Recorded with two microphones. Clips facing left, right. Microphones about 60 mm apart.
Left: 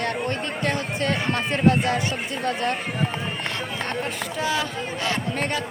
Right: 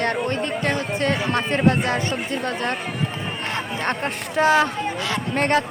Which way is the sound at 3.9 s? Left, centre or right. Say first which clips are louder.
Right 3 dB; right.